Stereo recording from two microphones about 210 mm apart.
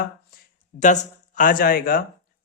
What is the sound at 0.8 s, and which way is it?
Speech, 35° left (ahead or behind).